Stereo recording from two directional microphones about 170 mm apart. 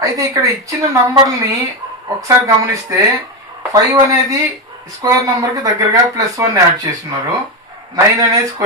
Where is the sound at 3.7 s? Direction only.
20° right (ahead or behind).